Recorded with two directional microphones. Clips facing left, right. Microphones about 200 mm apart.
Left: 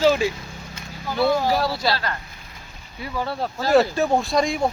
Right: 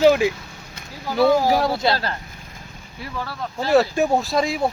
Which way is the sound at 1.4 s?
15° right (ahead or behind).